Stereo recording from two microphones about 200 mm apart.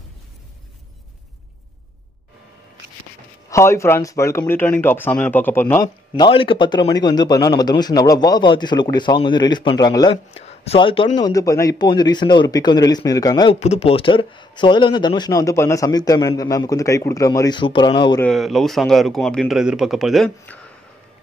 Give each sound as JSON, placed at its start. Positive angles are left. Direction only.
{"t": 3.4, "sound": "speech", "side_deg": 15}
{"t": 6.1, "sound": "a man's voice", "side_deg": 25}
{"t": 13.6, "sound": "a man's voice", "side_deg": 30}
{"t": 18.2, "sound": "speech", "side_deg": 0}